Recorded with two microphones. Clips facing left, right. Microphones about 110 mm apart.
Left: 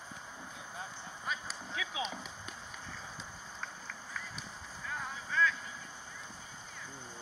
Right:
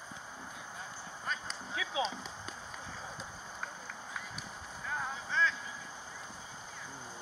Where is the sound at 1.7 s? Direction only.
30° right (ahead or behind).